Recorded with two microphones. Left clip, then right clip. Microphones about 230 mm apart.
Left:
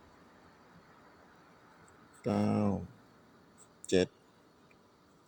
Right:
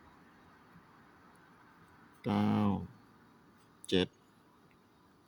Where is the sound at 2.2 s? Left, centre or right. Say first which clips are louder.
Left 1 dB; centre.